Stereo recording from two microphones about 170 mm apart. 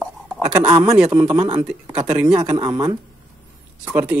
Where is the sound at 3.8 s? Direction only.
10° right (ahead or behind).